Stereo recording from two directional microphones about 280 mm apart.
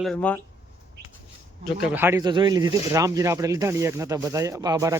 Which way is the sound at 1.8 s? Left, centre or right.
Centre.